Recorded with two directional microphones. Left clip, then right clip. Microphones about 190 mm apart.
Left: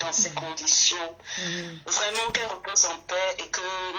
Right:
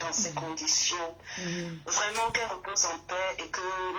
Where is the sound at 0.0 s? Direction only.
30° left (ahead or behind).